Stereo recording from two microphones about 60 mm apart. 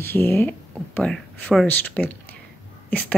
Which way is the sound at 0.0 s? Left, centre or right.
Left.